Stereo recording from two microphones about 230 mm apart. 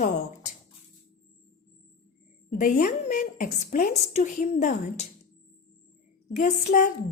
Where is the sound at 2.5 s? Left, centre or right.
Left.